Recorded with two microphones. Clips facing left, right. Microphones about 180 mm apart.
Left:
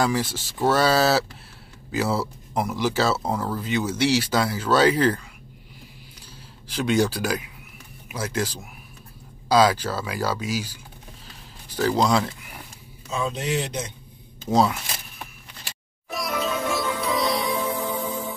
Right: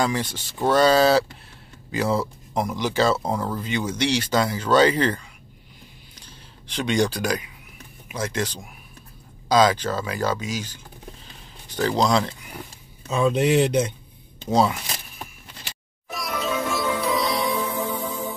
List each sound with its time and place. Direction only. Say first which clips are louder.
0.0 s speech: left 1 dB; 5° left (ahead or behind)
6.1 s a sound: left 1 dB; 5° left (ahead or behind)
8.1 s speech: even; 5° left (ahead or behind)
13.1 s speech: right 7 dB; 60° right (ahead or behind)
14.5 s speech: even; centre (ahead or behind)
16.1 s music: left 1 dB; centre (ahead or behind)